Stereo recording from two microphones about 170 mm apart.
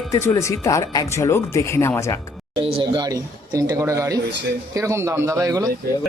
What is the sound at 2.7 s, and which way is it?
A man's voice, 25° right (ahead or behind).